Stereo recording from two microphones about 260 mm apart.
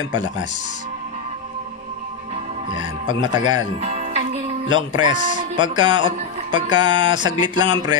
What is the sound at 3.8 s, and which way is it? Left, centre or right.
Music, right.